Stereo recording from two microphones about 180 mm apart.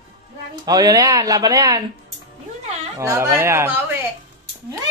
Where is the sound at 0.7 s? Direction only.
20° right (ahead or behind).